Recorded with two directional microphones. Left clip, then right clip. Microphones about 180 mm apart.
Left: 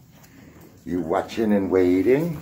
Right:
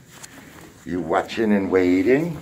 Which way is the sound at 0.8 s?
5° left (ahead or behind).